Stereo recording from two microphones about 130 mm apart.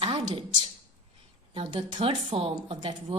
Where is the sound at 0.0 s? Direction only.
45° right (ahead or behind).